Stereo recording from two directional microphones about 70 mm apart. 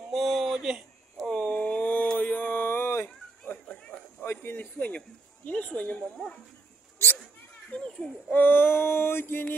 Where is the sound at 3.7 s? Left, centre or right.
Centre.